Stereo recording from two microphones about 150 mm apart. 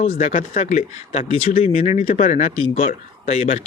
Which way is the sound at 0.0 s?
50° left (ahead or behind).